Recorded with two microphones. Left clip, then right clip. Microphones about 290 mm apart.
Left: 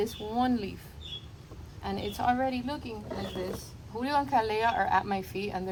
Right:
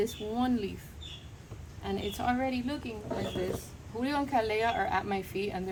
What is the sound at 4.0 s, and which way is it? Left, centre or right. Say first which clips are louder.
Speech: left 3 dB; centre.